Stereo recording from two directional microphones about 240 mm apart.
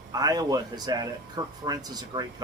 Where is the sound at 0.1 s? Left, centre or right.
Centre.